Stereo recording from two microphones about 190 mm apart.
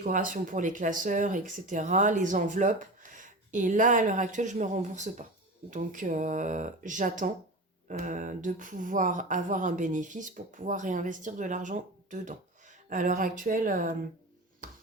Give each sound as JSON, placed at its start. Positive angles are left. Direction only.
{"t": 0.0, "sound": "speech", "side_deg": -45}